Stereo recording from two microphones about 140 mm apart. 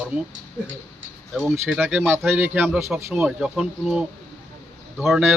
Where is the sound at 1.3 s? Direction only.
Centre (ahead or behind).